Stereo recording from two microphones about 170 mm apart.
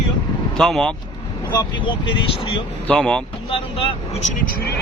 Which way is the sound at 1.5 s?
25° left (ahead or behind).